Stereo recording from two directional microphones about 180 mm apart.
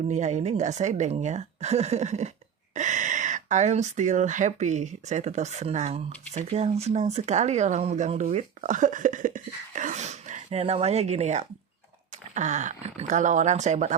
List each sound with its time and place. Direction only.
0.1 s speech: 40° right (ahead or behind)